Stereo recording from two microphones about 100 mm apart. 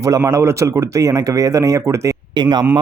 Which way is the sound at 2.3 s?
45° right (ahead or behind).